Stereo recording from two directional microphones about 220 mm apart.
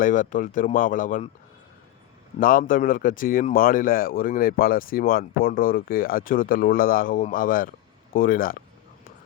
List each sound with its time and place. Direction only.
0.0 s speech: 35° left (ahead or behind)
2.4 s speech: 40° left (ahead or behind)